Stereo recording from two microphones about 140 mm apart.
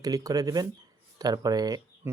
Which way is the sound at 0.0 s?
25° right (ahead or behind).